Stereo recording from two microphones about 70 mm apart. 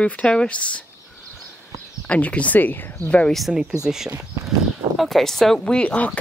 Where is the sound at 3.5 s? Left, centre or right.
Centre.